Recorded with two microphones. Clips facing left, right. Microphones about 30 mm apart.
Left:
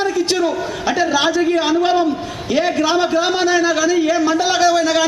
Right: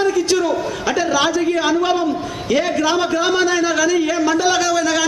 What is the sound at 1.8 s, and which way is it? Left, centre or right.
A man's voice, left.